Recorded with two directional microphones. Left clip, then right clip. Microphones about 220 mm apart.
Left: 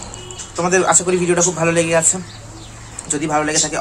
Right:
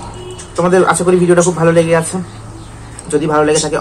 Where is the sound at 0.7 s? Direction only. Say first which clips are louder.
Right 4 dB; 15° left (ahead or behind).